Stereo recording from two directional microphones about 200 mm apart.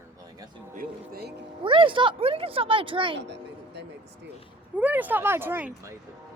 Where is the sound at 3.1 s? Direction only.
60° right (ahead or behind).